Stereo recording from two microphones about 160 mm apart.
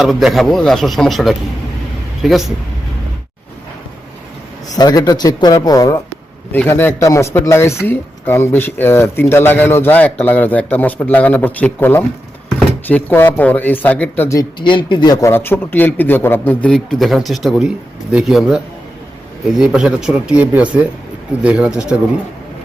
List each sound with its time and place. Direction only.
0.0 s a man's voice: centre (ahead or behind)
4.8 s speech: 25° left (ahead or behind)
14.6 s a man's voice: 30° left (ahead or behind); by 21.9 s 5° right (ahead or behind)